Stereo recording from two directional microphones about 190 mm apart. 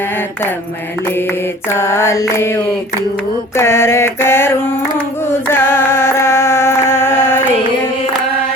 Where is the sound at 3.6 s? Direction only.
15° left (ahead or behind).